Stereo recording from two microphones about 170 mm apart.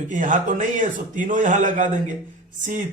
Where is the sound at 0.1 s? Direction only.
50° right (ahead or behind).